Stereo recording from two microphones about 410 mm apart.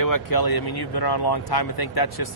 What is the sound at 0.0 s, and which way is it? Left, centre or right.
Speech, left.